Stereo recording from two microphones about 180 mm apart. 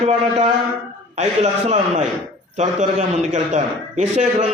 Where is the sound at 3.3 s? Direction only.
40° right (ahead or behind).